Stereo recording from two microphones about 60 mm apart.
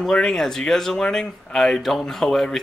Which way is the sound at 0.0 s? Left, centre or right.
Centre.